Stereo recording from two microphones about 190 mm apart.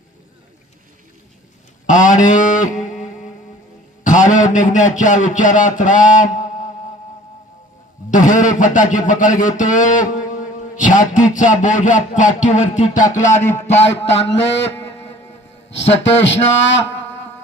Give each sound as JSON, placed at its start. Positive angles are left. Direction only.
{"t": 1.9, "sound": "a sound", "side_deg": 40}
{"t": 4.0, "sound": "speech", "side_deg": 40}
{"t": 8.1, "sound": "speech", "side_deg": 40}
{"t": 13.8, "sound": "a man's voice", "side_deg": 70}